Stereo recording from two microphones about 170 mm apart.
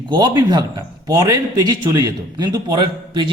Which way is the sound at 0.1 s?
25° right (ahead or behind).